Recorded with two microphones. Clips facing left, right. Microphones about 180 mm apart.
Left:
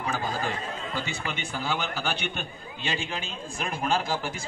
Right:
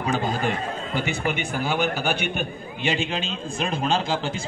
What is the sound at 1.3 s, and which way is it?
A man's voice, 15° right (ahead or behind).